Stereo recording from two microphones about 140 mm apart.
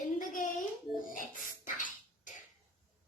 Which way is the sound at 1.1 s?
70° left (ahead or behind).